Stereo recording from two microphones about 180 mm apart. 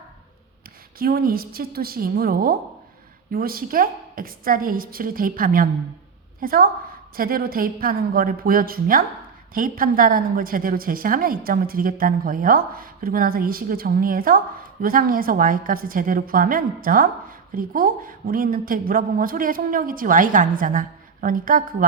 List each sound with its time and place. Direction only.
0.9 s a woman's voice: 55° right (ahead or behind)